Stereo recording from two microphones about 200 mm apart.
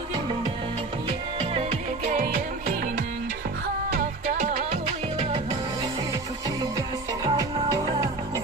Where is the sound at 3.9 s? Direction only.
40° right (ahead or behind).